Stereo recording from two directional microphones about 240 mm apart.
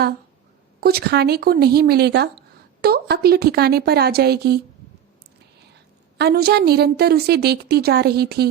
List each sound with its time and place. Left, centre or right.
0.8 s a woman's voice: right
6.1 s a woman's voice: right